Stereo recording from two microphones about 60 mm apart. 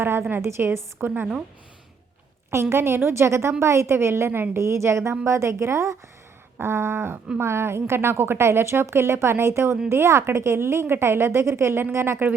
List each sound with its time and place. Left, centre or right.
0.0 s a woman's voice: right
0.4 s a woman's voice: right
1.0 s a sound: right
2.5 s a woman's voice: right
6.6 s a sound: right
7.3 s a woman's voice: right